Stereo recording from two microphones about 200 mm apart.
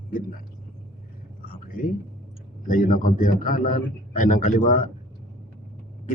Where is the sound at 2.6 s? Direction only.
40° left (ahead or behind).